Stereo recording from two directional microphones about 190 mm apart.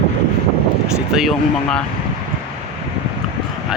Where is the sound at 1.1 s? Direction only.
Centre (ahead or behind).